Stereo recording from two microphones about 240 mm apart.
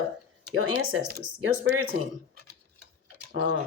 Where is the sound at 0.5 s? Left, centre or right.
Right.